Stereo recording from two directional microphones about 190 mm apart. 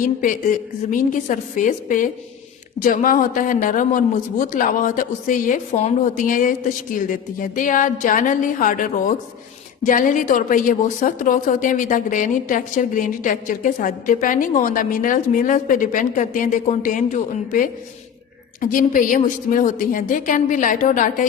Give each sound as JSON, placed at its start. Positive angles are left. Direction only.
{"t": 0.0, "sound": "a woman's voice", "side_deg": 45}